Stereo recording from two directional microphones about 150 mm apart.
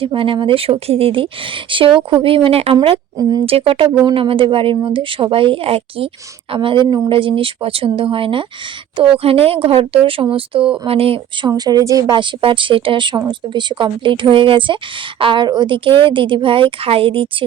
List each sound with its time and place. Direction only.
0.0 s speech: 35° right (ahead or behind)
4.0 s speech: 35° right (ahead or behind)
11.5 s speech: 25° right (ahead or behind)